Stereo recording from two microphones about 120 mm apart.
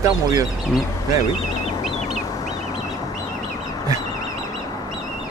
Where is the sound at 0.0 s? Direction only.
30° right (ahead or behind).